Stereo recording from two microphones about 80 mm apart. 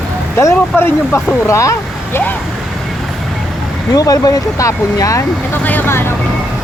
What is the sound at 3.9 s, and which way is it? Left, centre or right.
Speech, left.